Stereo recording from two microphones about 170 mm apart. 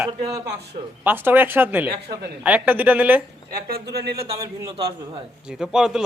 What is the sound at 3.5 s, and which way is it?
Speech, 65° right (ahead or behind).